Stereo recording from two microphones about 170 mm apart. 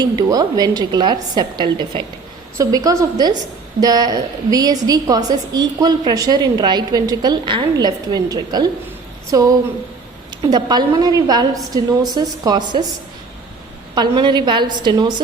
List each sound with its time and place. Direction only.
0.0 s a woman's voice: 20° right (ahead or behind)
13.9 s a woman's voice: 25° right (ahead or behind)